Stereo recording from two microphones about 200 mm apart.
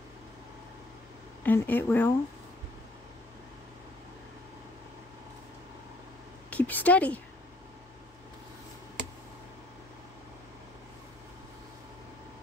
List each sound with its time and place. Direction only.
1.4 s speech: 10° left (ahead or behind)
6.5 s a woman's voice: 10° left (ahead or behind)